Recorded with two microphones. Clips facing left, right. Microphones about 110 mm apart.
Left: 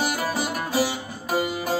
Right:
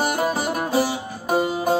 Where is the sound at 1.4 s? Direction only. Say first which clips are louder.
Right 5 dB; 30° right (ahead or behind).